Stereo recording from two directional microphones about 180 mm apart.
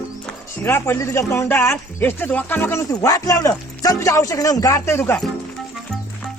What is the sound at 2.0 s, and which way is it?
Speech, 10° left (ahead or behind).